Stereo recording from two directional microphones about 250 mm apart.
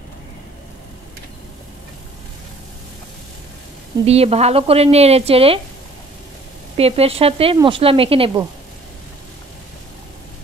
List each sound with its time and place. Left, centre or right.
4.0 s speech: right
6.8 s speech: right